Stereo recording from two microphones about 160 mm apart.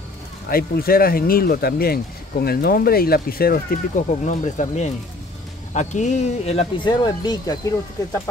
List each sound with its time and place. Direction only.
0.5 s speech: 65° left (ahead or behind); by 6.9 s 40° left (ahead or behind)
6.9 s speech: 25° left (ahead or behind)